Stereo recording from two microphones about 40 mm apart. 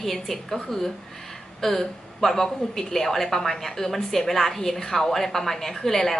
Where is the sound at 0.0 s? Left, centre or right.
Centre.